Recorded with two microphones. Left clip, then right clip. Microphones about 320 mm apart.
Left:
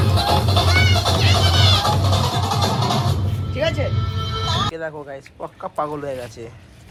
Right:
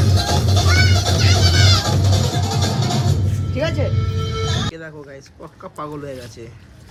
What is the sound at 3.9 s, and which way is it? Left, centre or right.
Music, centre.